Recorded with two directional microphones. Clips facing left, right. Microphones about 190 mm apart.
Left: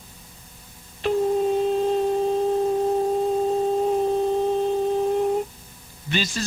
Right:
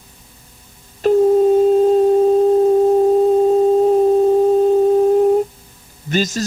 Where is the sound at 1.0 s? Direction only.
45° right (ahead or behind).